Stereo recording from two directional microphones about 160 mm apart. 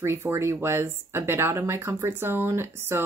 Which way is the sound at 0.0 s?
15° right (ahead or behind).